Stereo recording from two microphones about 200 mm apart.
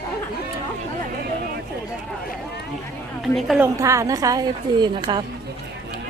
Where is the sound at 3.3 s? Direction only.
Centre (ahead or behind).